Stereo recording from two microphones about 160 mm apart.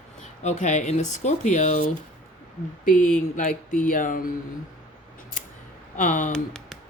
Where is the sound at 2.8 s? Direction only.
55° left (ahead or behind).